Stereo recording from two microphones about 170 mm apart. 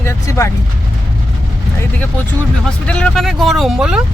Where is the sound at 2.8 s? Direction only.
5° left (ahead or behind).